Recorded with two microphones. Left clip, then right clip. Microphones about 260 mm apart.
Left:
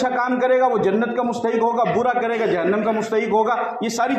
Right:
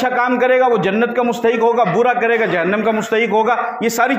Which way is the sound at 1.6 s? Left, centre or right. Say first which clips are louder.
Right 4 dB; right.